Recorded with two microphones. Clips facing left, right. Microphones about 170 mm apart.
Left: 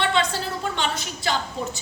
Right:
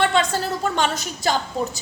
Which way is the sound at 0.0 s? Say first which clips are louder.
Right 3 dB; 45° right (ahead or behind).